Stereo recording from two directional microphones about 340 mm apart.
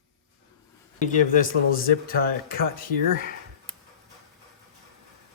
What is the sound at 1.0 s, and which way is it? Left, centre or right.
Speech, left.